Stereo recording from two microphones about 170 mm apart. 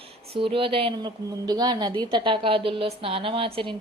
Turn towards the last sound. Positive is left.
turn(degrees=-35)  # may be behind; listen again after turning